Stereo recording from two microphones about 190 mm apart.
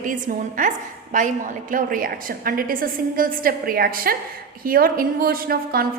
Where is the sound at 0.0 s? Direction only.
45° right (ahead or behind).